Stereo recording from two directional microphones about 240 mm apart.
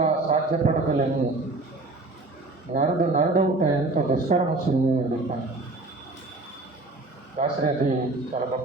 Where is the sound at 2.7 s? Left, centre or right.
Right.